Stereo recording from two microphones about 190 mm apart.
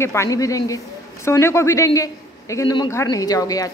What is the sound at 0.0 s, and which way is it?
A man's voice, 15° left (ahead or behind).